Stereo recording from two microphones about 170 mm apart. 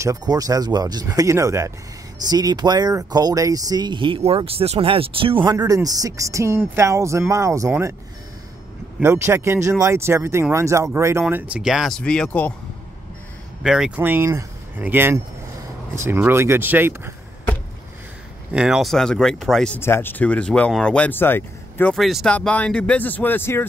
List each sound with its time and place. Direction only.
0.0 s speech: 20° right (ahead or behind)
9.0 s speech: 15° right (ahead or behind); by 12.5 s 10° left (ahead or behind)
13.6 s speech: 5° right (ahead or behind)
18.5 s speech: 5° right (ahead or behind); by 21.9 s 10° left (ahead or behind)
21.9 s speech: centre (ahead or behind)